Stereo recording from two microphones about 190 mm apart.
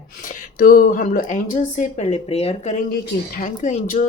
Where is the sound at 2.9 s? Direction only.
45° left (ahead or behind).